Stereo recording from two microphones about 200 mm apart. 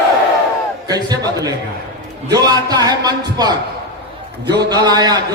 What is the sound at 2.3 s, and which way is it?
Speech, 20° right (ahead or behind).